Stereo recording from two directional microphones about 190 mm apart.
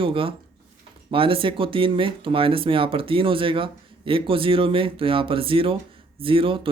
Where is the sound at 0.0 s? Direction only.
30° right (ahead or behind).